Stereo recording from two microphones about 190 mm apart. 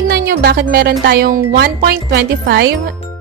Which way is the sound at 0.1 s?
55° right (ahead or behind).